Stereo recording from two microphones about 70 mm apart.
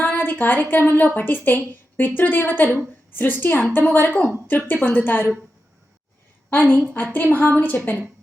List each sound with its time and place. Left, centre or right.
0.0 s a woman's voice: left
6.5 s a woman's voice: left